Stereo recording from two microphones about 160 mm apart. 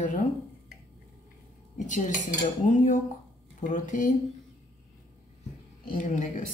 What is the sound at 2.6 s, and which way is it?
Speech, 50° left (ahead or behind).